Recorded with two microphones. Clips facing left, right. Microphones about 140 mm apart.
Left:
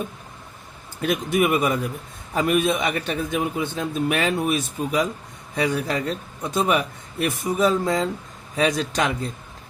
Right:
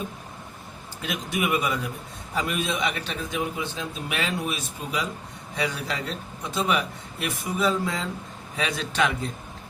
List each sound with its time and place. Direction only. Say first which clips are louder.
1.0 s a man's voice: left 7 dB; 50° left (ahead or behind)